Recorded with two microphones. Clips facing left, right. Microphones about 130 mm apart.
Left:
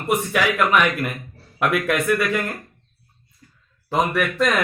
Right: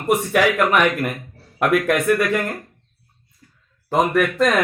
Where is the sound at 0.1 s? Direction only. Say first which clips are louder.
Right 4 dB; 40° right (ahead or behind).